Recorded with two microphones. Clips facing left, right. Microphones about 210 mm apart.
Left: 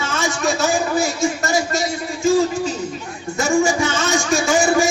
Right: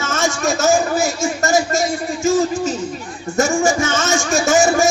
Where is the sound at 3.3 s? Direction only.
45° right (ahead or behind).